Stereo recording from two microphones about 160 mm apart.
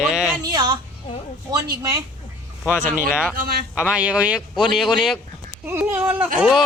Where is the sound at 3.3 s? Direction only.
65° right (ahead or behind).